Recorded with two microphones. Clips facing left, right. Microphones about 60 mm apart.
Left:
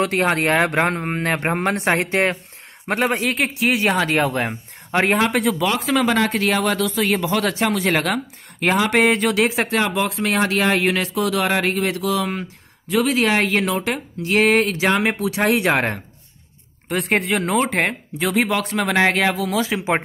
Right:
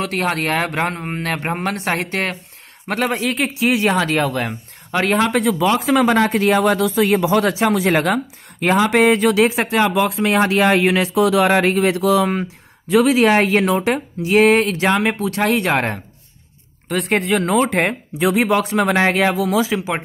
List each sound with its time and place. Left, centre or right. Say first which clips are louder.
0.0 s speech: left 2 dB; left
2.9 s speech: even; centre
3.2 s speech: right 1 dB; centre
4.2 s speech: even; centre
5.1 s speech: right 2 dB; centre
5.7 s speech: right 4 dB; centre
11.3 s speech: right 4 dB; right
13.4 s speech: right 4 dB; right
14.3 s speech: right 3 dB; centre
16.9 s speech: right 2 dB; centre
18.2 s speech: right 4 dB; centre